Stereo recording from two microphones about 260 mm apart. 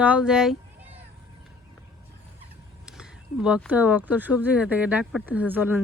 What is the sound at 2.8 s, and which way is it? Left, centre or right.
Speech, centre.